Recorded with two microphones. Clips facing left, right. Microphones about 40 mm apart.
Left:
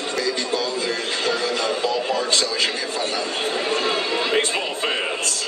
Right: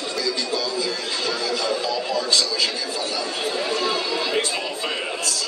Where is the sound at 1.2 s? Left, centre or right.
Left.